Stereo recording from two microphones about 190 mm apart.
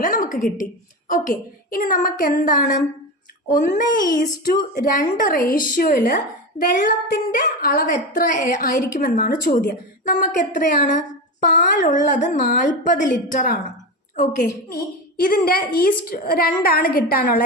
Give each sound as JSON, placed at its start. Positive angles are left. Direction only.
{"t": 0.0, "sound": "a woman's voice", "side_deg": 45}
{"t": 4.1, "sound": "a woman's voice", "side_deg": 45}